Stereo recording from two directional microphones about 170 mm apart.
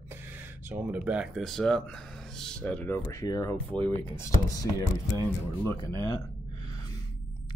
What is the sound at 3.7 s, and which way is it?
Speech, 10° left (ahead or behind).